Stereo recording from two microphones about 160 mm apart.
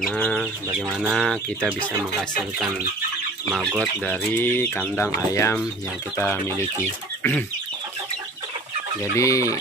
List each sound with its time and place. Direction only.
0.0 s speech: 5° left (ahead or behind)
0.7 s bird: 5° right (ahead or behind)
1.1 s speech: 5° left (ahead or behind)
9.1 s speech: 20° left (ahead or behind)